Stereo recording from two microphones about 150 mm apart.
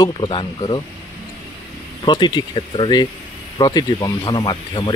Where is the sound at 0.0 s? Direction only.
30° left (ahead or behind).